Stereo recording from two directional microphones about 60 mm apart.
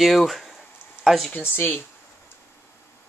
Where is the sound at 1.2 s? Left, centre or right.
Left.